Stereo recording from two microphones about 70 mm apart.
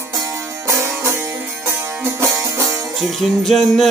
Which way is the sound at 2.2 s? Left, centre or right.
Right.